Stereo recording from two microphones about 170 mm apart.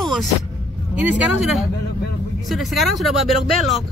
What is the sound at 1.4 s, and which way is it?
Speech, centre (ahead or behind).